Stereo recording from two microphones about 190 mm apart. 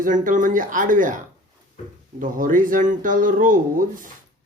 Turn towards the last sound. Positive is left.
turn(degrees=-45)  # may be behind; listen again after turning